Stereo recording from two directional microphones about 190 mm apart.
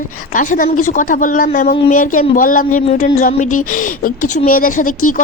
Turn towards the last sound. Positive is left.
turn(degrees=45)  # may be behind; listen again after turning